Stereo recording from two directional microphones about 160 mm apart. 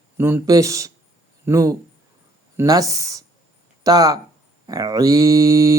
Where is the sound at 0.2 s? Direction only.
15° right (ahead or behind).